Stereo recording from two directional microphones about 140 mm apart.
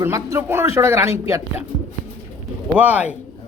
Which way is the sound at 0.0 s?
20° right (ahead or behind).